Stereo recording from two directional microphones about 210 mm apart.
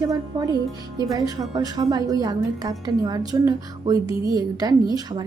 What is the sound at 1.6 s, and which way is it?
A woman's voice, 20° right (ahead or behind).